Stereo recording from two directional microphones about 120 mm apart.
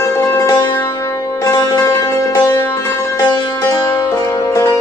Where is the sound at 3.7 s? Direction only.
25° left (ahead or behind).